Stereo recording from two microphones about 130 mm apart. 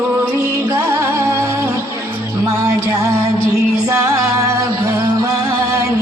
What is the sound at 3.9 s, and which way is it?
Music, 20° right (ahead or behind).